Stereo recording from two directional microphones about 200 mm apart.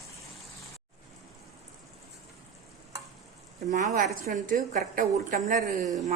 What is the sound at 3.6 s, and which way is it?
A woman's voice, 40° right (ahead or behind).